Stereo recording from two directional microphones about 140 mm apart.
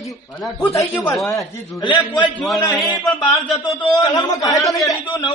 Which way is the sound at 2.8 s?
Centre (ahead or behind).